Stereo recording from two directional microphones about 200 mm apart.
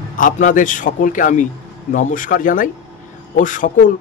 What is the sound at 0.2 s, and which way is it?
A man's voice, 40° left (ahead or behind).